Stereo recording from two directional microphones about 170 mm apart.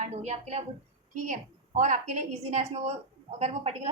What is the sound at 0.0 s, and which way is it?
A woman's voice, 40° right (ahead or behind).